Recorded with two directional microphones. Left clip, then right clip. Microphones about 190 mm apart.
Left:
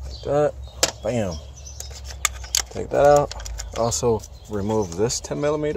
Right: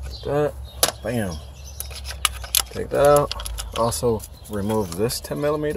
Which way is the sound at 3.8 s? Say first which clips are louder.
Even; 15° left (ahead or behind).